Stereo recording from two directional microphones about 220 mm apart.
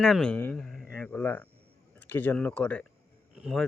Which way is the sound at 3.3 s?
Centre (ahead or behind).